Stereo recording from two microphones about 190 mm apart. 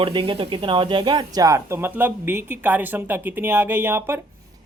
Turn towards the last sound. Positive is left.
turn(degrees=-10)  # may be behind; listen again after turning